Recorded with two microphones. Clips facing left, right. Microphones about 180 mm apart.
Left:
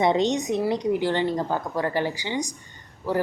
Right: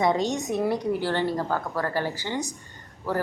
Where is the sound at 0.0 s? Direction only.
25° left (ahead or behind).